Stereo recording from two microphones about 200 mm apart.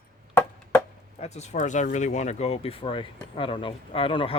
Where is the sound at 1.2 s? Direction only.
35° left (ahead or behind).